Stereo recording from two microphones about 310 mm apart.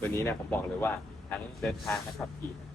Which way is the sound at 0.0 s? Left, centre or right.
Centre.